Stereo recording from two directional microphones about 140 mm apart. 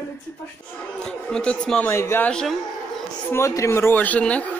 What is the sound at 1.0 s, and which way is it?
Speech, 5° left (ahead or behind).